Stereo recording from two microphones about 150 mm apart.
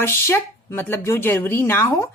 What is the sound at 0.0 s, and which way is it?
A woman's voice, 15° left (ahead or behind).